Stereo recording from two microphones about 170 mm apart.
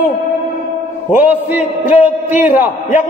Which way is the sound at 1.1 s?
10° right (ahead or behind).